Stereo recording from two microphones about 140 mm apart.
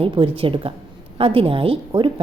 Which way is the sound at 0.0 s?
40° right (ahead or behind).